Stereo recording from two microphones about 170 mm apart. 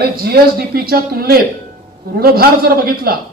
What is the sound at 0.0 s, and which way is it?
A man's voice, 65° right (ahead or behind).